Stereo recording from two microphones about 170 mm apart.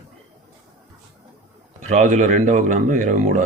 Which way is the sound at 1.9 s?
45° right (ahead or behind).